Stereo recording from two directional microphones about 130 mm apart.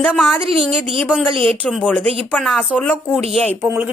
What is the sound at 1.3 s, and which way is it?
Speech, 45° right (ahead or behind).